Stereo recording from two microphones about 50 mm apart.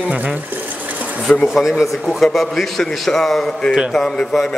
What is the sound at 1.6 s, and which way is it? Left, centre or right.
A man's voice, centre.